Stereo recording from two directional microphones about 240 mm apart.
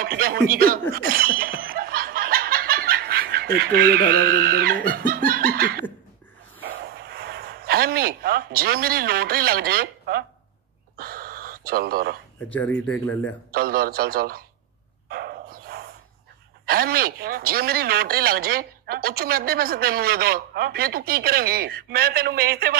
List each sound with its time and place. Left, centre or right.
0.0 s chuckle: right
6.6 s speech: right
11.0 s gasp: right
12.5 s speech: centre
13.5 s speech: right
15.0 s dog: right
16.6 s speech: right